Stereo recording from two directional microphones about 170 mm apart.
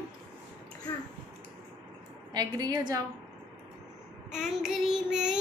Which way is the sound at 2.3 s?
25° right (ahead or behind).